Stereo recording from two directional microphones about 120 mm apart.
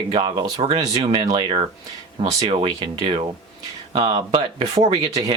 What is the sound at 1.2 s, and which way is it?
Speech, 40° right (ahead or behind).